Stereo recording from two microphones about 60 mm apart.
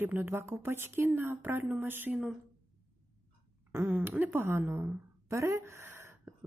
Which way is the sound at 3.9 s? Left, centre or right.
Right.